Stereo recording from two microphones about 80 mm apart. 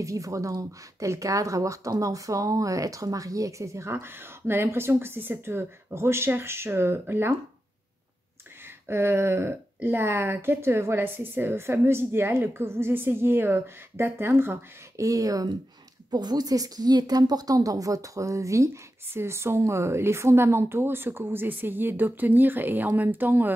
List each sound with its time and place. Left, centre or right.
0.0 s speech: right
8.8 s a woman's voice: right
15.0 s speech: right
16.1 s a woman's voice: right